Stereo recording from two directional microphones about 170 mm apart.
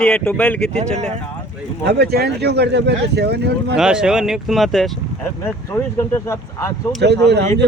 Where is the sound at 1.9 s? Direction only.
70° right (ahead or behind).